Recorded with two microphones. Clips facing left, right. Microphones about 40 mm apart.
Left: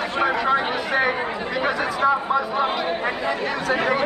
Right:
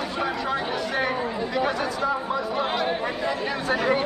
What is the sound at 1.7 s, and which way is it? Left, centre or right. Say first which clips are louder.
Speech: left 5 dB; centre.